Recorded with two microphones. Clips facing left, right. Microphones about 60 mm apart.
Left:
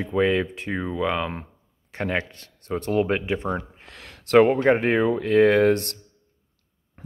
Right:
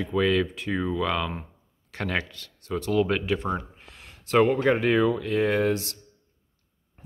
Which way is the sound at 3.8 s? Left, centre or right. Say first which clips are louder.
Left 4 dB; left.